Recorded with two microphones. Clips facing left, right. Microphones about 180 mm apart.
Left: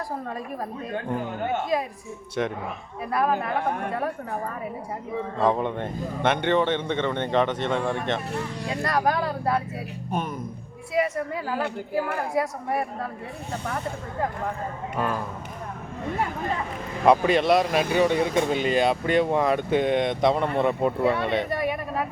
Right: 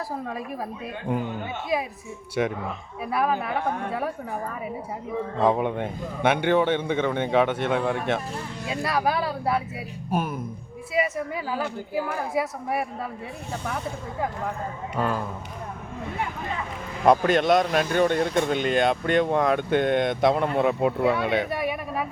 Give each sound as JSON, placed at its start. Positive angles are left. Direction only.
{"t": 1.7, "sound": "a man's voice", "side_deg": -5}
{"t": 5.4, "sound": "a man's voice", "side_deg": -10}
{"t": 17.1, "sound": "speech", "side_deg": 0}